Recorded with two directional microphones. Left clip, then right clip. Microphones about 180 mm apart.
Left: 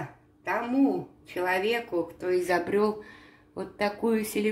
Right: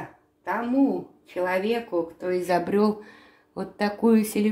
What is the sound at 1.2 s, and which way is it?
Speech, 10° right (ahead or behind).